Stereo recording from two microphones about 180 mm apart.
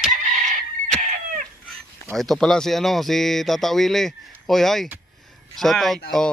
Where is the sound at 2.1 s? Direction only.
Centre (ahead or behind).